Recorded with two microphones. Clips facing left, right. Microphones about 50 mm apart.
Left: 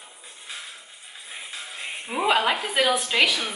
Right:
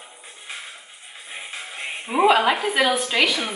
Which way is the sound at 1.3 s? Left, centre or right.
Right.